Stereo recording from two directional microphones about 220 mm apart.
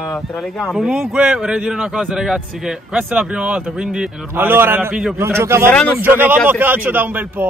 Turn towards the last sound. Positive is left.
turn(degrees=-10)  # may be behind; listen again after turning